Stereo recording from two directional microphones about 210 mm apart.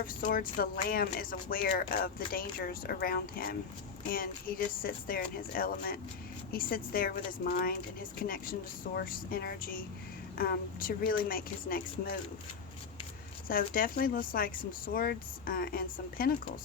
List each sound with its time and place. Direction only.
0.2 s speech: 45° left (ahead or behind)
13.5 s speech: 45° left (ahead or behind)